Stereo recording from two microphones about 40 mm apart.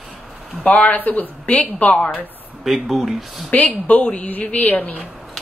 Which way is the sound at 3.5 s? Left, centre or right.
Left.